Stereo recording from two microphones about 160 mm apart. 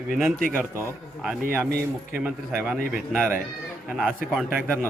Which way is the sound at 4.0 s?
Centre (ahead or behind).